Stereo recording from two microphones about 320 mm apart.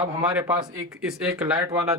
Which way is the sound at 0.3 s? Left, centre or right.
Centre.